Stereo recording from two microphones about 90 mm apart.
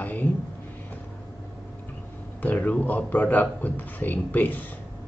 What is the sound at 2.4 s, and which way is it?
A man's voice, 20° left (ahead or behind).